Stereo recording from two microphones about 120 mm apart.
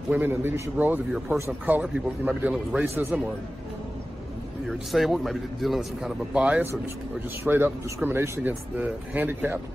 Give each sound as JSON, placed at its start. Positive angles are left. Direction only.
{"t": 0.1, "sound": "speech", "side_deg": -20}
{"t": 4.6, "sound": "a man's voice", "side_deg": 0}